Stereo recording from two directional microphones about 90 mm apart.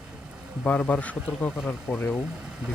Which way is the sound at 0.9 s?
15° left (ahead or behind).